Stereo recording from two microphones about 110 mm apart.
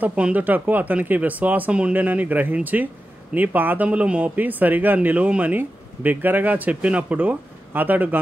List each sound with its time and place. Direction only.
0.0 s speech: 10° right (ahead or behind)